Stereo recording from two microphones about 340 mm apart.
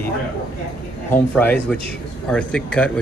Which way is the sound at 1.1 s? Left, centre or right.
Centre.